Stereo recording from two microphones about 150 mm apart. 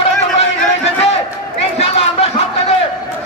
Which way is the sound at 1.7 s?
40° left (ahead or behind).